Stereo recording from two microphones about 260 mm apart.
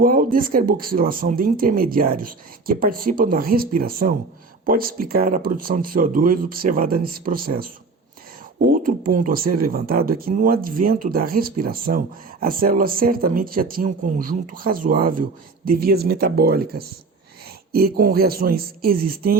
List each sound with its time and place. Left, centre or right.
0.0 s speech: right
8.7 s speech: right